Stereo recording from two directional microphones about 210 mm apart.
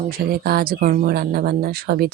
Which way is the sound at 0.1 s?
45° right (ahead or behind).